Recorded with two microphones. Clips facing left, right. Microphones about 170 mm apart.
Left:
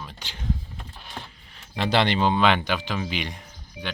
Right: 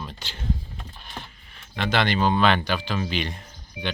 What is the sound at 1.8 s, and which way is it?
Speech, 30° left (ahead or behind).